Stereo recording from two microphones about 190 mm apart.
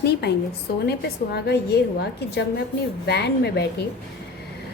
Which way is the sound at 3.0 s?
60° left (ahead or behind).